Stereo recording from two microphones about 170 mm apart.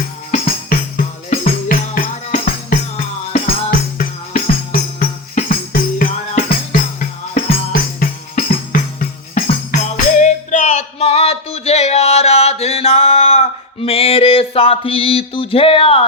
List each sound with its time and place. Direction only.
0.3 s music: 55° left (ahead or behind)
9.5 s music: 45° left (ahead or behind)